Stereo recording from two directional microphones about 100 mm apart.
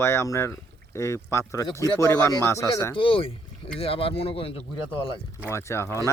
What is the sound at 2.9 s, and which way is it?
Speech, 60° left (ahead or behind).